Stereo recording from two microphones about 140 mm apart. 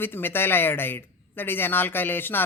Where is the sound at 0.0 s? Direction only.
15° left (ahead or behind).